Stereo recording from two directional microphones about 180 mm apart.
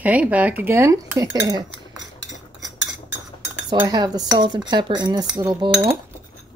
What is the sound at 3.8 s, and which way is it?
Speech, 20° right (ahead or behind).